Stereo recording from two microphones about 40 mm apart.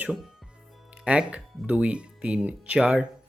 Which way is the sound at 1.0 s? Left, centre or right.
Right.